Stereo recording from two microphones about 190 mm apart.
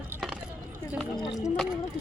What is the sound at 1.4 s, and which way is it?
Speech, centre (ahead or behind).